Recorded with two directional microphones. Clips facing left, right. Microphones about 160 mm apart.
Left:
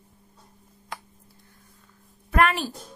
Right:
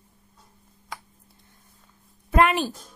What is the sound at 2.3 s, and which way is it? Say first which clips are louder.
Speech: right 2 dB; 20° right (ahead or behind).